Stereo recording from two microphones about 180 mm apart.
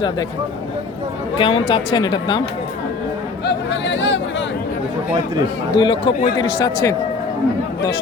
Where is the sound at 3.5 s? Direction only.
85° left.